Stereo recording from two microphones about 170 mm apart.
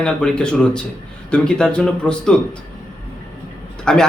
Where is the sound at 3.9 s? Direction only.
5° left (ahead or behind).